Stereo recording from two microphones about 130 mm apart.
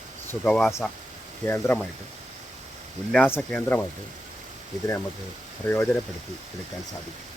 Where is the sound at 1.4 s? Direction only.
20° left (ahead or behind).